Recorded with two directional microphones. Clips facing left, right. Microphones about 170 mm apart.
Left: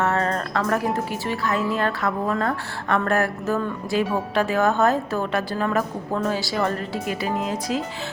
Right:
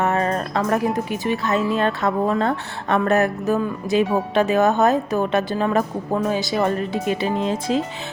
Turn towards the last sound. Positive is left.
turn(degrees=-25)  # may be behind; listen again after turning